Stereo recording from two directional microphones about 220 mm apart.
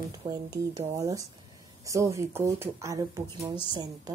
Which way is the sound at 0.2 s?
15° right (ahead or behind).